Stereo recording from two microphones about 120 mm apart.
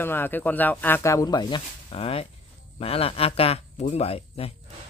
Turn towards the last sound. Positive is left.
turn(degrees=55)  # may be behind; listen again after turning